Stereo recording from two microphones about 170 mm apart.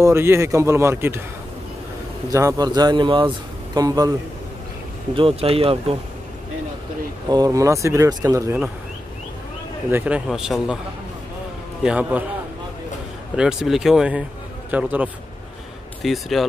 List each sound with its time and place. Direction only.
0.0 s speech: 15° right (ahead or behind)
2.3 s speech: 20° right (ahead or behind)
5.1 s speech: 35° right (ahead or behind)
7.2 s speech: 20° right (ahead or behind)
9.8 s a man's voice: 10° right (ahead or behind)
11.8 s speech: 10° right (ahead or behind)
13.4 s a man's voice: 5° right (ahead or behind)